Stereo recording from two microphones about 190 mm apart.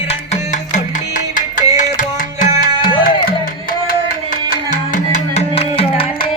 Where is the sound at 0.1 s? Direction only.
40° left (ahead or behind).